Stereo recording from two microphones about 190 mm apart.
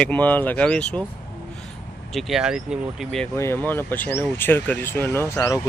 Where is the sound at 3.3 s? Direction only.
15° left (ahead or behind).